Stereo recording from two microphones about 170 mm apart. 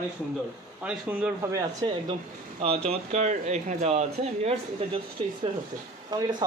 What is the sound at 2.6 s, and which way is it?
Speech, 35° right (ahead or behind).